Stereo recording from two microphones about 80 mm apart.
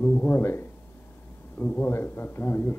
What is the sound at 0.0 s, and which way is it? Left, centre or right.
A man's voice, left.